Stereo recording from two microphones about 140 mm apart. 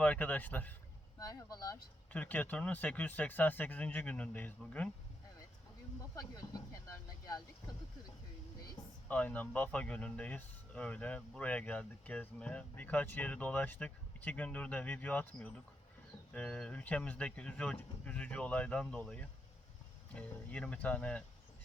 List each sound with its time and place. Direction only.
0.0 s speech: 10° left (ahead or behind)
1.2 s speech: 25° left (ahead or behind)
2.1 s speech: 10° left (ahead or behind)
6.1 s a sound: 25° left (ahead or behind)
9.0 s speech: 10° left (ahead or behind)